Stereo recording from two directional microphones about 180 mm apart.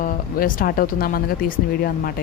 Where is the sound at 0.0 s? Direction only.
50° left (ahead or behind).